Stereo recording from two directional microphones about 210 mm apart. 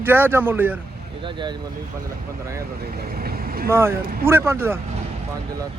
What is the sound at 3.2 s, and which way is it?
Vehicle, 45° right (ahead or behind).